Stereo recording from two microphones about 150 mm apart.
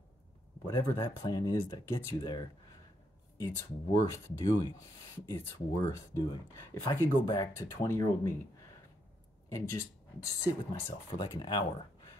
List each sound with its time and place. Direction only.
0.7 s speech: 25° left (ahead or behind)
9.5 s speech: 20° left (ahead or behind)